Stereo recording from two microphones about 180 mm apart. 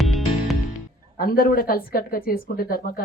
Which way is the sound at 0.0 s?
Centre (ahead or behind).